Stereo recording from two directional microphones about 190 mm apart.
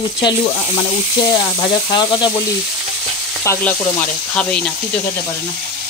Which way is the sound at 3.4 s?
15° left (ahead or behind).